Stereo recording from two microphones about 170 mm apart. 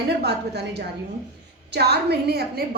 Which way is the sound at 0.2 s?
75° right (ahead or behind).